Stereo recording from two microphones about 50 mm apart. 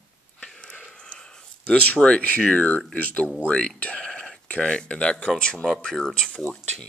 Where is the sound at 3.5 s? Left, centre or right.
Centre.